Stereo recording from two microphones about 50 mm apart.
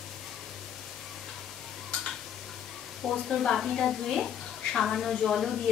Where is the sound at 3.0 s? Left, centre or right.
Centre.